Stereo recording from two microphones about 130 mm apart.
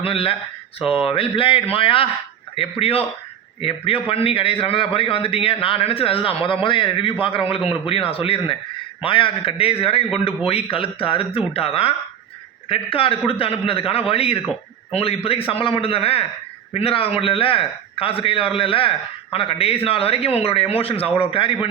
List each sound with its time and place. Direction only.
0.0 s a man's voice: 45° left (ahead or behind)